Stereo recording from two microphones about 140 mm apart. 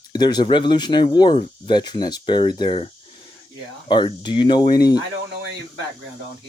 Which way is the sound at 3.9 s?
35° left (ahead or behind).